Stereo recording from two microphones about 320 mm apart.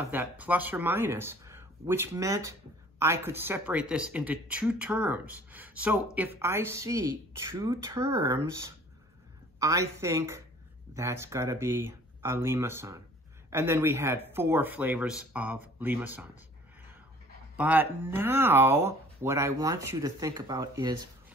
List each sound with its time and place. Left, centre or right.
0.1 s speech: centre
17.6 s speech: centre